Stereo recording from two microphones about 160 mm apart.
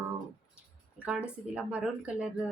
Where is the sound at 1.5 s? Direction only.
10° right (ahead or behind).